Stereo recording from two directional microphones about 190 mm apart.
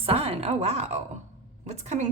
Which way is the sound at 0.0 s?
30° right (ahead or behind).